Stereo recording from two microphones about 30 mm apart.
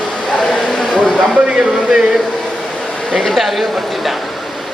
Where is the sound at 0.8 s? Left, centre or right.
Left.